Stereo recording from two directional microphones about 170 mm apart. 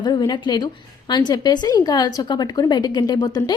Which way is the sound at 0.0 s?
25° left (ahead or behind).